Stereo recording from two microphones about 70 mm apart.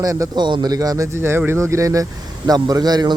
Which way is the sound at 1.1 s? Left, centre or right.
Right.